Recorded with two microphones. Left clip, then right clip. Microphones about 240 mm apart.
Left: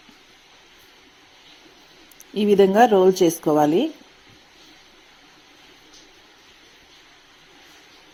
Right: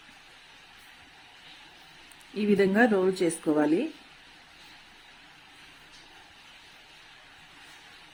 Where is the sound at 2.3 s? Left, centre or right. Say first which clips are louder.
Left 9 dB; centre.